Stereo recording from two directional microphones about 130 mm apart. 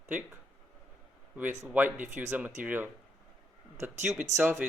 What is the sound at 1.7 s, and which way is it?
Speech, 15° right (ahead or behind).